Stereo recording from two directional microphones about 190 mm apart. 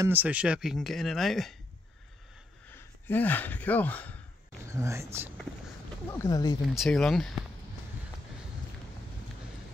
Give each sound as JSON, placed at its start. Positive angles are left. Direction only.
{"t": 0.0, "sound": "speech", "side_deg": -10}
{"t": 2.7, "sound": "speech", "side_deg": 10}
{"t": 4.6, "sound": "speech", "side_deg": -15}
{"t": 6.1, "sound": "speech", "side_deg": 15}
{"t": 6.7, "sound": "speech", "side_deg": 0}